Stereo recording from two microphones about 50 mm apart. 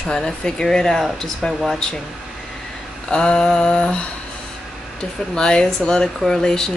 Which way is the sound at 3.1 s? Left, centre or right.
Centre.